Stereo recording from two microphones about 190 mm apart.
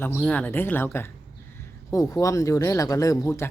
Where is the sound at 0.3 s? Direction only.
5° left (ahead or behind).